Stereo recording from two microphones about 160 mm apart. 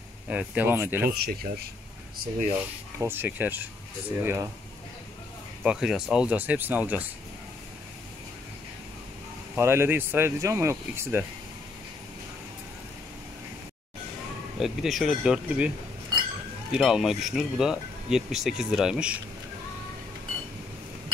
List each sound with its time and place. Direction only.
0.3 s speech: 10° right (ahead or behind)
1.1 s speech: 75° right (ahead or behind)
2.5 s speech: 15° right (ahead or behind)
5.6 s speech: 5° right (ahead or behind)
9.6 s speech: 15° right (ahead or behind)
14.6 s speech: centre (ahead or behind)
16.7 s speech: 5° right (ahead or behind)